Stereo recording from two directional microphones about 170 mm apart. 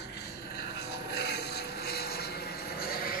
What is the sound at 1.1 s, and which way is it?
Vehicle, 70° left (ahead or behind).